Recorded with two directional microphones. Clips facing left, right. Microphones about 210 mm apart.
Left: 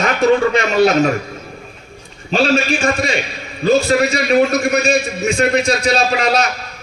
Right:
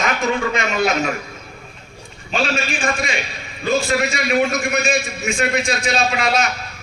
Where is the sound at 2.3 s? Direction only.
35° left (ahead or behind).